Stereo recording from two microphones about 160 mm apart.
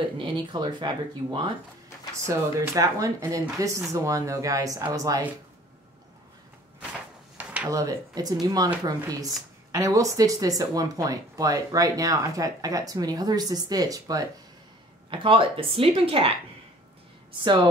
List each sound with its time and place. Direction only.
0.2 s speech: 30° right (ahead or behind)
6.8 s a sound: 5° right (ahead or behind); by 8.6 s 25° right (ahead or behind)
8.8 s speech: 20° right (ahead or behind)
15.0 s a woman's voice: 30° right (ahead or behind)
17.4 s speech: 25° right (ahead or behind)